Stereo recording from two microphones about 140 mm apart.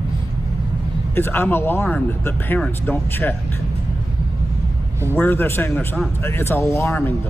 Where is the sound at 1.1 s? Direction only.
15° left (ahead or behind).